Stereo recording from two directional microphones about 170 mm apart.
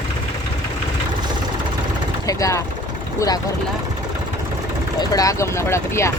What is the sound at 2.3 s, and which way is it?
Speech, 20° left (ahead or behind).